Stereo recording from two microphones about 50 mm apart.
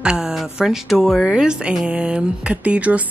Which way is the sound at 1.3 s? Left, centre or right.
Centre.